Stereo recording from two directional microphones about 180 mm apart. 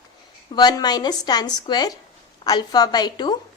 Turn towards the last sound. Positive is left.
turn(degrees=25)  # may be behind; listen again after turning